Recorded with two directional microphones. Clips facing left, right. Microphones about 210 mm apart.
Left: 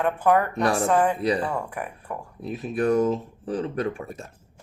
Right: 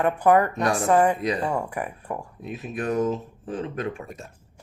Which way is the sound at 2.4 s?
35° left (ahead or behind).